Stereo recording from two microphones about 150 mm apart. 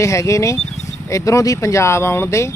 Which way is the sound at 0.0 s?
20° left (ahead or behind).